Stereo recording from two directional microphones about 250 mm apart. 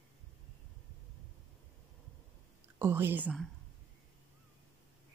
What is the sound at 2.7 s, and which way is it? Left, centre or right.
Speech, centre.